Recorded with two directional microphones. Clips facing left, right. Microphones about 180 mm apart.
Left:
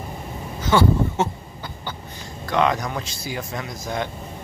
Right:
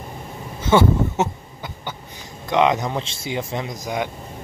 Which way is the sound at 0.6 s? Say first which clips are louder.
Right 2 dB; 25° right (ahead or behind).